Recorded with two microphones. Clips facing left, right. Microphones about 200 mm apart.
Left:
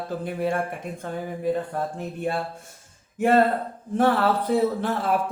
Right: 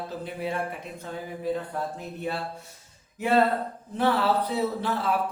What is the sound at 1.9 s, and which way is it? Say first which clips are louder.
Speech: left 4 dB; 50° left (ahead or behind).